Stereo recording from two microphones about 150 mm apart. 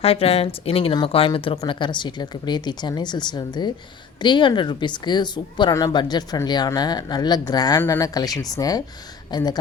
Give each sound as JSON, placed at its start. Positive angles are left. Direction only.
{"t": 0.0, "sound": "a woman's voice", "side_deg": 40}